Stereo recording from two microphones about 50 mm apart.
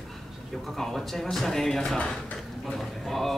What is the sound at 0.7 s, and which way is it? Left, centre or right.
Speech, centre.